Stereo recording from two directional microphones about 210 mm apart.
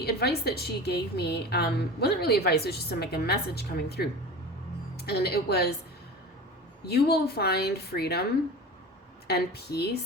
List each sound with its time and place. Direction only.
0.0 s a woman's voice: 50° left (ahead or behind)
6.8 s a woman's voice: 50° left (ahead or behind)